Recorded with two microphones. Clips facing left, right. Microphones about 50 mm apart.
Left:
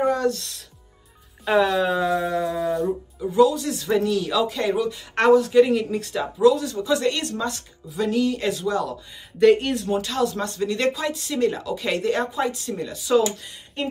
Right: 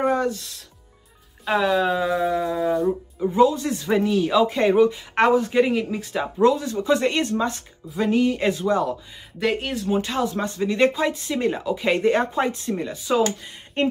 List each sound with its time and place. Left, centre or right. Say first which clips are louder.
0.3 s speech: left 2 dB; centre
3.2 s speech: even; right
4.9 s speech: left 2 dB; centre
9.4 s speech: left 7 dB; centre
9.9 s speech: right 2 dB; right
13.8 s speech: right 6 dB; right